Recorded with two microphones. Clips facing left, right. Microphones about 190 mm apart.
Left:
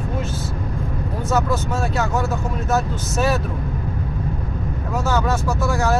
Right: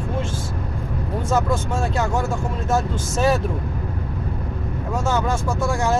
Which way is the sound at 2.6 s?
25° right (ahead or behind).